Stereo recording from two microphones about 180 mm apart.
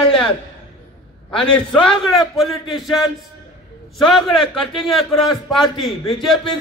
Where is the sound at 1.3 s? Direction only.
30° left (ahead or behind).